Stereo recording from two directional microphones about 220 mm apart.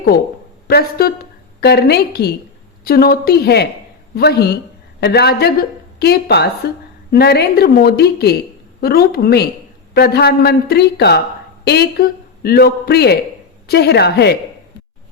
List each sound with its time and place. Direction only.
0.7 s a woman's voice: 45° left (ahead or behind)